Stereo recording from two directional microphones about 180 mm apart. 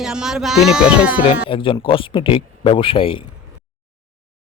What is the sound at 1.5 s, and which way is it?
Speech, 30° left (ahead or behind).